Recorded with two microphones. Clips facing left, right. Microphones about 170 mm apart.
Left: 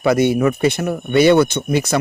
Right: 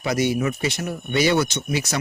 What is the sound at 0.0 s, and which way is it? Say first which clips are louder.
Speech: left 7 dB; 55° left (ahead or behind).